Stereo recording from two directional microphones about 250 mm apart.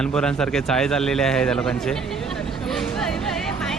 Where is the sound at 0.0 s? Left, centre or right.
Centre.